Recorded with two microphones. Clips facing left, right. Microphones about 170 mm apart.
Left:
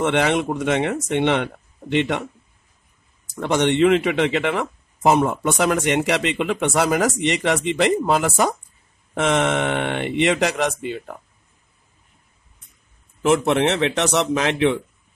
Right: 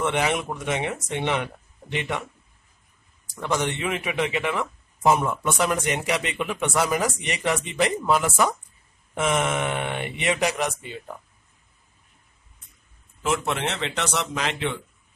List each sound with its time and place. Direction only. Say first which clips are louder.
0.0 s speech: left 5 dB; 75° left (ahead or behind)
3.3 s speech: left 8 dB; 80° left
13.2 s speech: left 8 dB; 70° left (ahead or behind)